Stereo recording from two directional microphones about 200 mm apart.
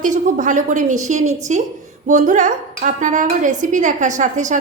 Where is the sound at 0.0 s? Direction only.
40° right (ahead or behind).